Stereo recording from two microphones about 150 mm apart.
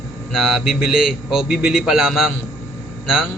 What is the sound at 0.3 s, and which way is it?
Speech, 5° right (ahead or behind).